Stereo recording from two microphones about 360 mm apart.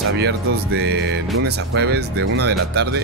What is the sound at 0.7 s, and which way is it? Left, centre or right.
Speech, right.